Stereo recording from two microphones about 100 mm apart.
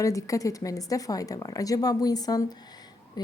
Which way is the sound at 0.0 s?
30° left (ahead or behind).